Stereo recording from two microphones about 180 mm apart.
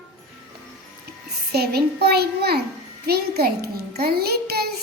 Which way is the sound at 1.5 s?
60° right (ahead or behind).